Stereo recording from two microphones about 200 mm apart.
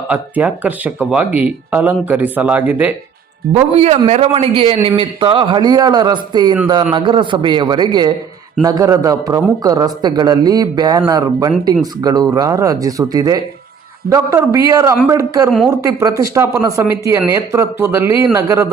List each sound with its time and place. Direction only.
0.1 s speech: 10° right (ahead or behind)
3.5 s a man's voice: 30° right (ahead or behind); by 18.7 s 15° right (ahead or behind)